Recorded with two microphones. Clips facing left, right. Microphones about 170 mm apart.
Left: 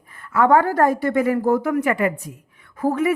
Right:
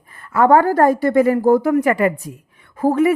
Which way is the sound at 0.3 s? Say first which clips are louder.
Right 3 dB; 35° right (ahead or behind).